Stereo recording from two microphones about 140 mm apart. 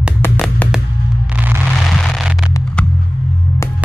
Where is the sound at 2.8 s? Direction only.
5° left (ahead or behind).